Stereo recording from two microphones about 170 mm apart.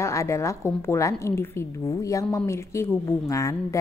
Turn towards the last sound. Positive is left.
turn(degrees=20)  # may be behind; listen again after turning